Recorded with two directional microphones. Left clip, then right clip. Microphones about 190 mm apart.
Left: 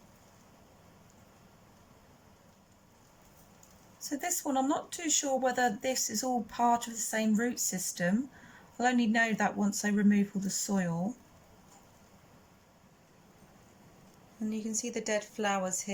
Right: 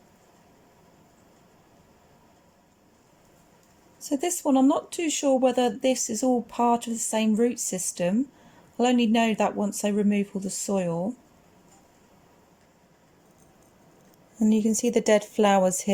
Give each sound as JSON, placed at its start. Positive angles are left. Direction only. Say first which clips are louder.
{"t": 4.2, "sound": "speech", "louder": "right 8 dB", "side_deg": -15}
{"t": 14.3, "sound": "speech", "louder": "right 12 dB", "side_deg": -40}